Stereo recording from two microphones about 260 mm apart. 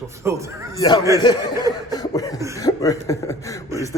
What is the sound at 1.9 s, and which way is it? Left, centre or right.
Cough, centre.